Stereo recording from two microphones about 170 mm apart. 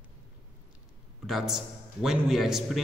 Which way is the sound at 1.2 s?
Centre (ahead or behind).